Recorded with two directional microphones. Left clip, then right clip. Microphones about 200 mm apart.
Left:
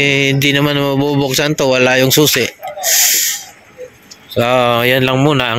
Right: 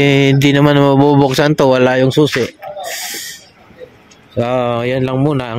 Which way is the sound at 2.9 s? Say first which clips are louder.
Left 11 dB; 15° right (ahead or behind).